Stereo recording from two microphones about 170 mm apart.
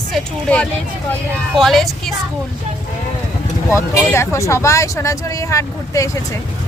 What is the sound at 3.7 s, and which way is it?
Speech, 15° left (ahead or behind).